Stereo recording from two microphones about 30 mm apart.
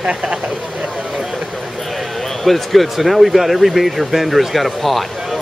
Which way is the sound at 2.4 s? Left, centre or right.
Centre.